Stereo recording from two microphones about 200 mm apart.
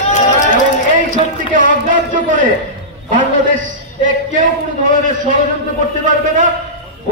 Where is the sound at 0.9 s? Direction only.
40° right (ahead or behind).